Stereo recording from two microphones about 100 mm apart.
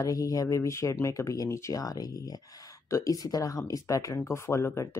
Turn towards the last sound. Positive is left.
turn(degrees=30)  # may be behind; listen again after turning